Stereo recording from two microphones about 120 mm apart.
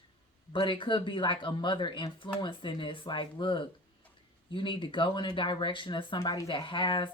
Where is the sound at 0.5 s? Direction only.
45° left (ahead or behind).